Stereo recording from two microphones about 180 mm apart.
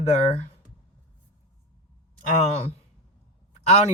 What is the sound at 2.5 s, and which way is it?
Speech, 35° left (ahead or behind).